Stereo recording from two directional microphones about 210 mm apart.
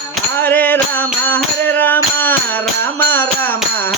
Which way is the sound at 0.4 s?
10° left (ahead or behind).